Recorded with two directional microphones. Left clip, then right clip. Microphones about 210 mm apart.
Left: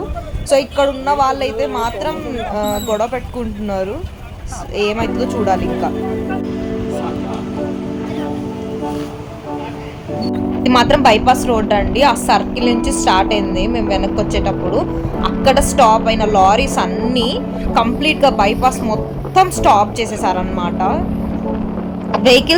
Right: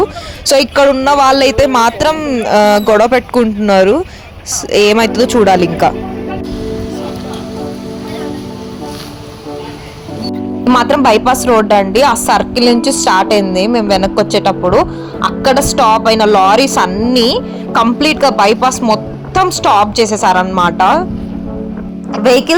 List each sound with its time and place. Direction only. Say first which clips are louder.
0.4 s speech: right 6 dB; 45° right (ahead or behind)
10.8 s speech: right 2 dB; 25° right (ahead or behind)
22.3 s speech: right 1 dB; 10° right (ahead or behind)